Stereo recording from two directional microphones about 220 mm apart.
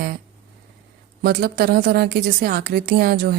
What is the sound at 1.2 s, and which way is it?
Speech, 45° right (ahead or behind).